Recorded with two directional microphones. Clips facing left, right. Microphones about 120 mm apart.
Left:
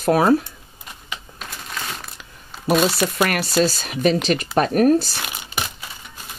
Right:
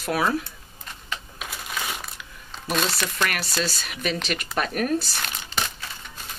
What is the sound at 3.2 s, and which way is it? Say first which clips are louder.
Speech: left 8 dB; 45° left (ahead or behind).